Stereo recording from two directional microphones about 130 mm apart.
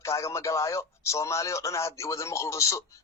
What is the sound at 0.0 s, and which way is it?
Speech, 20° left (ahead or behind).